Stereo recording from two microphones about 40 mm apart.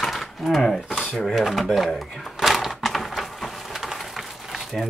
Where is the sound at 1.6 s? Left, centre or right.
Centre.